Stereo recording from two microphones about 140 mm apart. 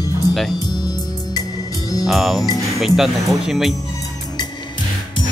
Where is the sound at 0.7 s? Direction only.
30° left (ahead or behind).